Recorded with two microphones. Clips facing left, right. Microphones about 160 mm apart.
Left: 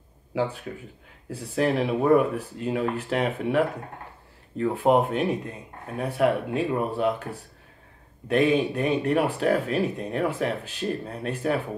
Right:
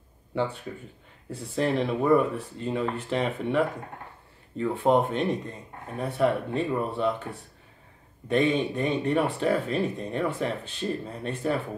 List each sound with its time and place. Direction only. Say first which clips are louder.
1.3 s speech: left 2 dB; 5° left (ahead or behind)
4.6 s speech: left 2 dB; 5° left (ahead or behind)
8.3 s speech: left 2 dB; 5° left (ahead or behind)